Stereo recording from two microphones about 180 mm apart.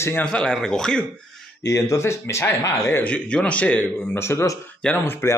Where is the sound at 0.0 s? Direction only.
10° left (ahead or behind).